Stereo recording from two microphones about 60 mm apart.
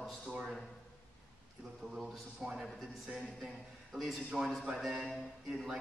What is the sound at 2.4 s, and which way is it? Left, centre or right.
Speech, centre.